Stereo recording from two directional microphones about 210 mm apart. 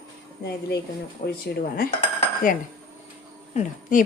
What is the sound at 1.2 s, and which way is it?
Speech, 35° left (ahead or behind).